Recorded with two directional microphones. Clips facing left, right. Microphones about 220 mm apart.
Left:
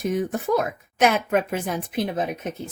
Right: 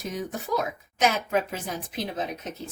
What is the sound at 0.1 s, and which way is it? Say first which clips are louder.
Speech: left 6 dB; 55° left (ahead or behind).